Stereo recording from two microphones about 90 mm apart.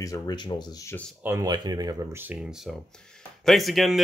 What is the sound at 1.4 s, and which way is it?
Speech, 50° right (ahead or behind).